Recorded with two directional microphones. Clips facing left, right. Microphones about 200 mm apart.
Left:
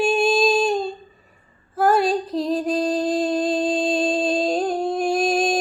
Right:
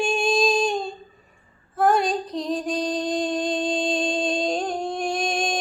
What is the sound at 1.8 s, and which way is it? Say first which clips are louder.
Music: left 2 dB; 5° left (ahead or behind).